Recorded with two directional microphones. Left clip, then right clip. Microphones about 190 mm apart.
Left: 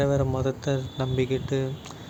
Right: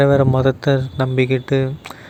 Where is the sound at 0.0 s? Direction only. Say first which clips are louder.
Right 11 dB; 40° right (ahead or behind).